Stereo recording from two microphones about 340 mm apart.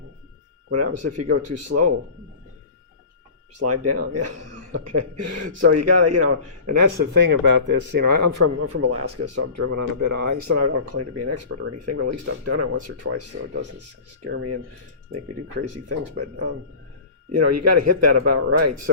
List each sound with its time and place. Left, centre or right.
0.7 s speech: right
3.6 s speech: right
6.7 s speech: right
8.5 s speech: right